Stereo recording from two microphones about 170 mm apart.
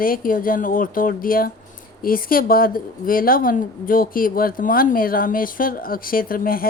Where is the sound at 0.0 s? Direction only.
55° left (ahead or behind).